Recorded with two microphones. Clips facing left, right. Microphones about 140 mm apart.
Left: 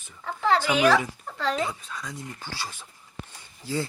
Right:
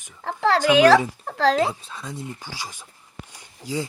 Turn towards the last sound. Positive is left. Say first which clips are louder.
# right 1 dB
turn(degrees=-15)  # may be behind; listen again after turning